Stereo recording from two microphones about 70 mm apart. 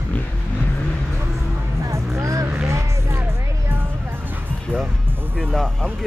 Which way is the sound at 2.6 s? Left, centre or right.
Right.